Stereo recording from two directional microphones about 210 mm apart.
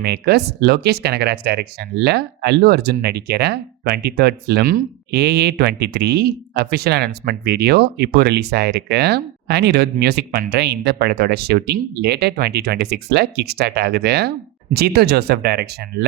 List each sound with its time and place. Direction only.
0.0 s speech: 50° right (ahead or behind)